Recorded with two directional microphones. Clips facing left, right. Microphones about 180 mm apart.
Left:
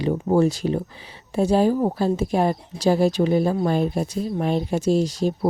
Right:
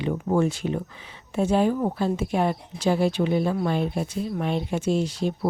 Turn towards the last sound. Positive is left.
turn(degrees=40)  # may be behind; listen again after turning